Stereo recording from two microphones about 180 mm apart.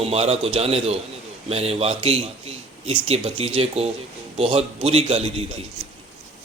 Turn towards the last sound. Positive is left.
turn(degrees=-35)  # may be behind; listen again after turning